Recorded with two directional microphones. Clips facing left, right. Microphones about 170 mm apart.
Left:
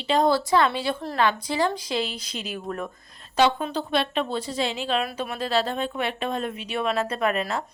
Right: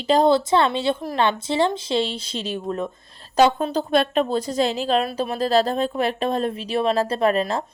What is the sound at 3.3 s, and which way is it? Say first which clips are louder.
Speech: right 4 dB; 40° right (ahead or behind).